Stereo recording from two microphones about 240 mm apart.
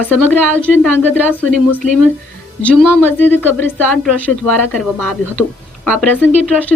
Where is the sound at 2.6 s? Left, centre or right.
Centre.